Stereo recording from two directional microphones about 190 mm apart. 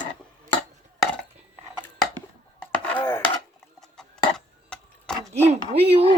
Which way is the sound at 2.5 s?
10° left (ahead or behind).